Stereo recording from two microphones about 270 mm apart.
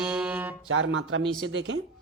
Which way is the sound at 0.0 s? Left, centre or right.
Centre.